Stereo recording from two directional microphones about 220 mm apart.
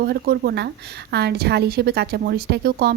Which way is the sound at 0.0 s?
45° right (ahead or behind).